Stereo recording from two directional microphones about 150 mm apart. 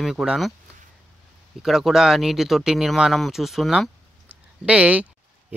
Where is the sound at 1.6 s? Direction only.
Centre (ahead or behind).